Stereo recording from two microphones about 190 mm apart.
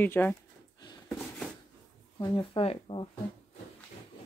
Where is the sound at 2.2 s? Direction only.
30° left (ahead or behind).